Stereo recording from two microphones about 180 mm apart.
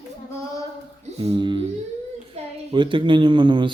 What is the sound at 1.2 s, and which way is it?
A child's voice, 30° right (ahead or behind).